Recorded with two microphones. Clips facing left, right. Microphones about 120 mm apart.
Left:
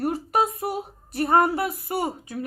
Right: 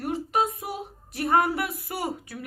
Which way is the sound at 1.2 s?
35° left (ahead or behind).